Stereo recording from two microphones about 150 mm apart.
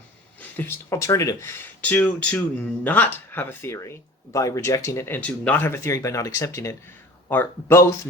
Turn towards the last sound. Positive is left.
turn(degrees=15)  # may be behind; listen again after turning